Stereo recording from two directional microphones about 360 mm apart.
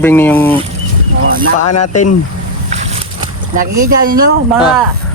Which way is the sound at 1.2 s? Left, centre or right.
Right.